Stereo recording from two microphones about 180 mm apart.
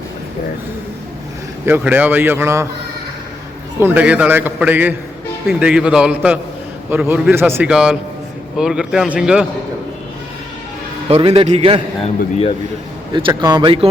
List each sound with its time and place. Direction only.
1.6 s a man's voice: 10° right (ahead or behind)
3.8 s a man's voice: 10° right (ahead or behind)
11.1 s a man's voice: 30° right (ahead or behind)
12.0 s speech: 35° left (ahead or behind)
13.1 s a man's voice: 25° right (ahead or behind)